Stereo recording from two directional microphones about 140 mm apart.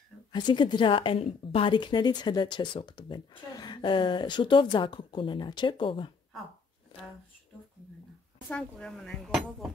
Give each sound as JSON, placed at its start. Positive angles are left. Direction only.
{"t": 0.3, "sound": "a woman's voice", "side_deg": 35}
{"t": 6.9, "sound": "a sound", "side_deg": 35}
{"t": 8.5, "sound": "speech", "side_deg": 5}